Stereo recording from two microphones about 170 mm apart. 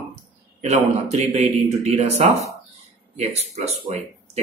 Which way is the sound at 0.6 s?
40° right (ahead or behind).